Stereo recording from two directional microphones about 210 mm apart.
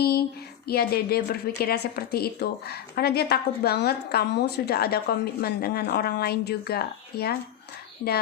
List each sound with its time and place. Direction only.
0.0 s a woman's voice: 45° left (ahead or behind)